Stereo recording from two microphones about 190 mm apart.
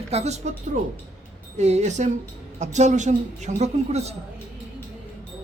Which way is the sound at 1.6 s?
35° right (ahead or behind).